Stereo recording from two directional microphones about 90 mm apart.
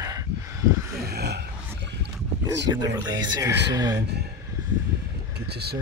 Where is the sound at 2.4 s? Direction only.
45° right (ahead or behind).